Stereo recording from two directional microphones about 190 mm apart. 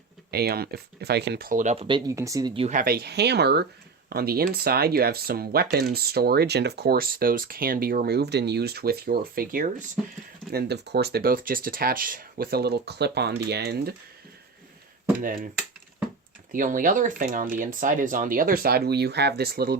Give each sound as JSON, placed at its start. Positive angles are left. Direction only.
{"t": 0.3, "sound": "speech", "side_deg": -55}
{"t": 2.0, "sound": "speech", "side_deg": -15}
{"t": 2.6, "sound": "speech", "side_deg": -40}
{"t": 2.8, "sound": "speech", "side_deg": -55}
{"t": 10.5, "sound": "speech", "side_deg": -60}
{"t": 15.2, "sound": "speech", "side_deg": -50}
{"t": 16.5, "sound": "speech", "side_deg": -45}